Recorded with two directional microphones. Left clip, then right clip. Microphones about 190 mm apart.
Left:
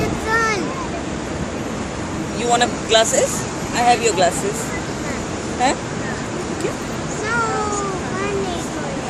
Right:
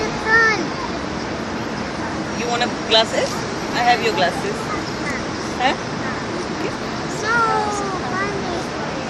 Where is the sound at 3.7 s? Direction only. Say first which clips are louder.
Left 1 dB; 55° left (ahead or behind).